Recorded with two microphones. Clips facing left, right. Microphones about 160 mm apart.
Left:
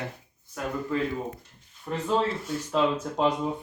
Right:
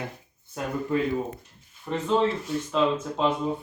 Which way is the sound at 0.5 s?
25° right (ahead or behind).